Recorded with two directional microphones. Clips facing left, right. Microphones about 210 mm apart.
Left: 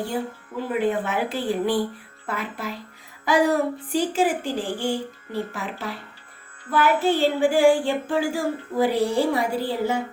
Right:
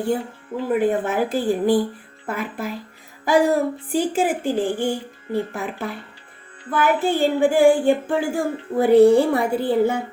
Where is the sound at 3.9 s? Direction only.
50° right (ahead or behind).